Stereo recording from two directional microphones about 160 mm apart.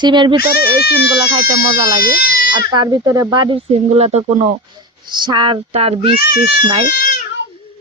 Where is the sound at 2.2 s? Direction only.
65° left (ahead or behind).